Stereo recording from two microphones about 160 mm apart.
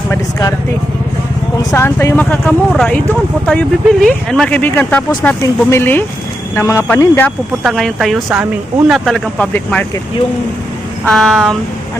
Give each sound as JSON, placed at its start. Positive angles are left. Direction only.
{"t": 0.1, "sound": "speech", "side_deg": 20}
{"t": 1.7, "sound": "speech", "side_deg": 15}
{"t": 11.0, "sound": "speech", "side_deg": 5}